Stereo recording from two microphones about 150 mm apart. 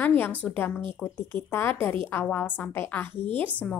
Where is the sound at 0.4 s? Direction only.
10° left (ahead or behind).